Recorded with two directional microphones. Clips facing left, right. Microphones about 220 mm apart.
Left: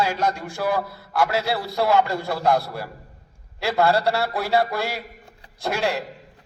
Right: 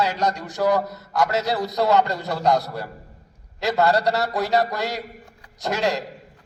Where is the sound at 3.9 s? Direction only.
15° right (ahead or behind).